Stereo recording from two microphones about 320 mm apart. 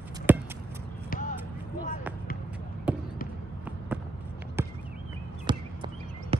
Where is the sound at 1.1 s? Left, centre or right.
Left.